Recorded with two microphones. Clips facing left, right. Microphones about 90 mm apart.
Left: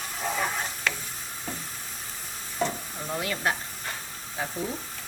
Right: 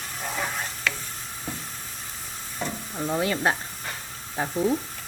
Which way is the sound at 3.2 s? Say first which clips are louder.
Right 4 dB; 30° right (ahead or behind).